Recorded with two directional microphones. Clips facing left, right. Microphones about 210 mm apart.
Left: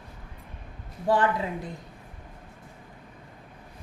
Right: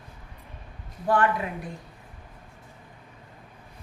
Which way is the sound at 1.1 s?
25° left (ahead or behind).